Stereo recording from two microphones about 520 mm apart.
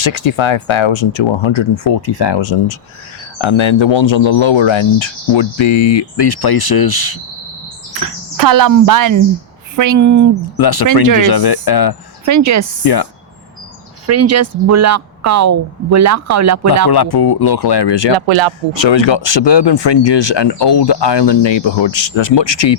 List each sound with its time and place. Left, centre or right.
0.0 s speech: left
8.0 s speech: right
10.6 s speech: left
12.2 s speech: right
12.8 s speech: left
14.1 s speech: right
16.9 s speech: left
18.3 s speech: right
18.8 s speech: left